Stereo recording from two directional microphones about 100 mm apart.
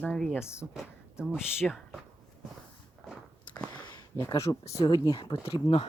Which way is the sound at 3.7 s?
45° left (ahead or behind).